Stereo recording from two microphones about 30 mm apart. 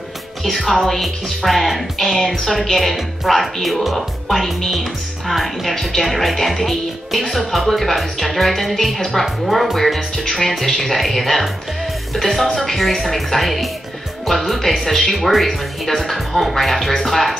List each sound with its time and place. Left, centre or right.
0.4 s speech: centre
2.1 s speech: centre
2.4 s speech: centre